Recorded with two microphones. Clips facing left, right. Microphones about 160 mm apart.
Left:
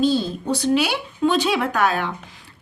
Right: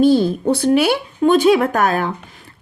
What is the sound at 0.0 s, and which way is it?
A woman's voice, 55° right (ahead or behind).